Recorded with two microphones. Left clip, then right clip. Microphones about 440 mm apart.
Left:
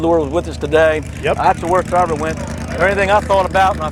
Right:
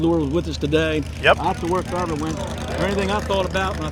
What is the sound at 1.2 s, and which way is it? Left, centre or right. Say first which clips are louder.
Speech: right 2 dB; right.